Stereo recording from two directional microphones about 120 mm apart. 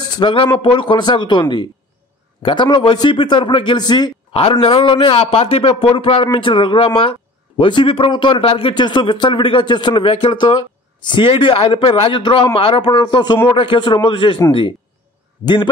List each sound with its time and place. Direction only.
0.1 s speech: 45° left (ahead or behind)
4.3 s a man's voice: 50° left (ahead or behind)
15.4 s speech: 40° left (ahead or behind)